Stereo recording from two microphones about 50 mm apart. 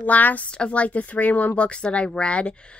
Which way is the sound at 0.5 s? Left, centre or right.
Left.